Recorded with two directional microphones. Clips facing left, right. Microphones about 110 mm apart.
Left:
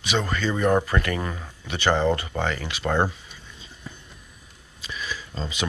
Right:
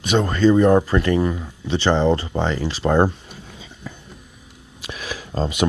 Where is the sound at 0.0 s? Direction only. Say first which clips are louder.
Right 9 dB; 40° right (ahead or behind); by 3.0 s 20° right (ahead or behind).